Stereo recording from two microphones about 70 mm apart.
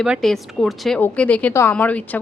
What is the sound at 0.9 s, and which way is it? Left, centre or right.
A woman's voice, left.